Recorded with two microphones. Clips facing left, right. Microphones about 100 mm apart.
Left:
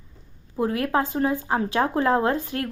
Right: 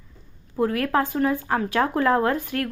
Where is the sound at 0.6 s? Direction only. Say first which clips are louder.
Right 1 dB; 20° left (ahead or behind).